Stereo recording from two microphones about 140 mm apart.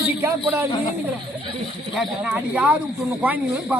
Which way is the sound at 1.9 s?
10° right (ahead or behind).